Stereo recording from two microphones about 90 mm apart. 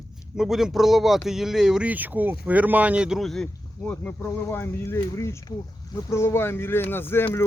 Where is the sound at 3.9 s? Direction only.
20° left (ahead or behind).